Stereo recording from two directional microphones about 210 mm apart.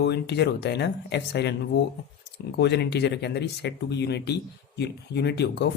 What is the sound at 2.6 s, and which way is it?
Speech, 55° left (ahead or behind).